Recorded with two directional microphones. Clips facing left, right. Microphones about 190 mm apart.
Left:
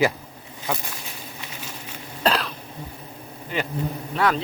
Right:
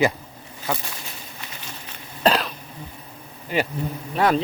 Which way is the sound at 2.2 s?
Centre (ahead or behind).